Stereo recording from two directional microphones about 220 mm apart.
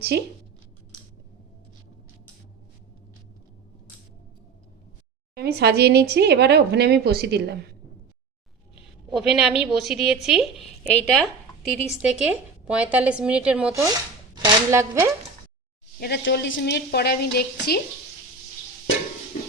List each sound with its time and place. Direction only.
0.1 s speech: 50° right (ahead or behind)
5.3 s speech: 45° right (ahead or behind)
9.0 s a woman's voice: centre (ahead or behind)
16.0 s a woman's voice: 50° left (ahead or behind)